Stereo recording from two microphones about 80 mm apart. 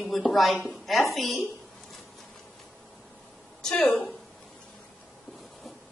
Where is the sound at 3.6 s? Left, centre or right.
Centre.